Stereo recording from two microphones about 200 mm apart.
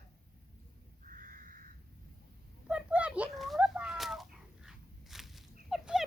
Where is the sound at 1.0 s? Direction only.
40° right (ahead or behind).